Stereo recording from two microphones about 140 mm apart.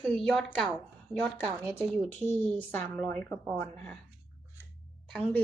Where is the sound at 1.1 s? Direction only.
15° right (ahead or behind).